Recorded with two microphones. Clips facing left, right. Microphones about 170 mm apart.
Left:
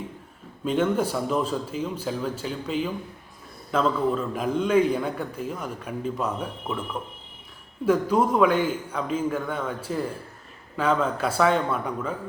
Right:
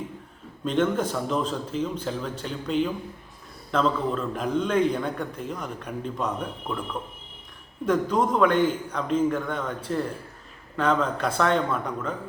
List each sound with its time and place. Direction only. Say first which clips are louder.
0.6 s a man's voice: left 1 dB; 5° left (ahead or behind)
7.9 s a man's voice: left 2 dB; 10° left (ahead or behind)